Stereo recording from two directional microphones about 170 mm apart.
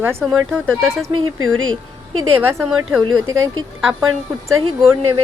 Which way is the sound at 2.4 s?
15° right (ahead or behind).